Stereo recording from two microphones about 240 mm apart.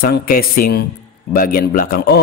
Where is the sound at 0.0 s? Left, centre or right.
Left.